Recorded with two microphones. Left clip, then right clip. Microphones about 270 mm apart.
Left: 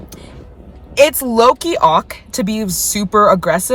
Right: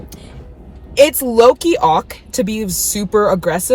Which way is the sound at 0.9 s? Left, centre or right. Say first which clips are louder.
Right 1 dB; centre.